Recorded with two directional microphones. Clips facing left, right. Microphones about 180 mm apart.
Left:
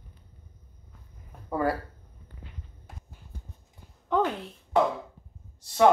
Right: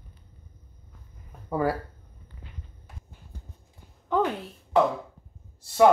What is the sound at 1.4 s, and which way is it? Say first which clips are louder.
Speech: right 1 dB; 10° right (ahead or behind).